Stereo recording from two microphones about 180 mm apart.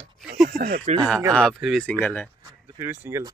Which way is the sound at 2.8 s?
15° right (ahead or behind).